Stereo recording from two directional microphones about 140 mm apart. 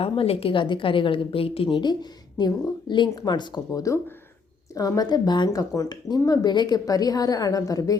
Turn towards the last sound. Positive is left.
turn(degrees=25)  # may be behind; listen again after turning